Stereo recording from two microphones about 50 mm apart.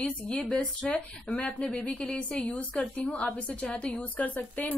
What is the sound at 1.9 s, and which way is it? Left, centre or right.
Speech, left.